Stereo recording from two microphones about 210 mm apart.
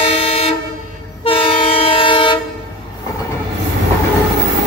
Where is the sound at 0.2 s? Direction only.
30° left (ahead or behind).